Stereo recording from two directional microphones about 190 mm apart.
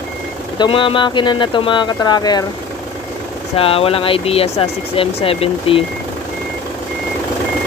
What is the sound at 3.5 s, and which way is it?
Speech, 30° left (ahead or behind).